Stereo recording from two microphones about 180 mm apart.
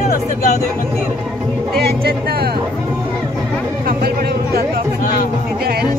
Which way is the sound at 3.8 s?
60° right (ahead or behind).